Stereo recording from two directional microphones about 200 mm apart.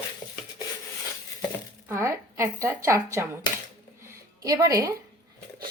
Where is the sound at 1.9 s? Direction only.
15° right (ahead or behind).